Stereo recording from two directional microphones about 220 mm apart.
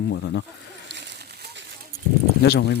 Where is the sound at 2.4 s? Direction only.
50° left (ahead or behind).